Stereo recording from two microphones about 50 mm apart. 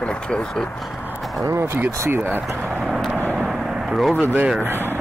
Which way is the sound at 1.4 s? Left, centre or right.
Right.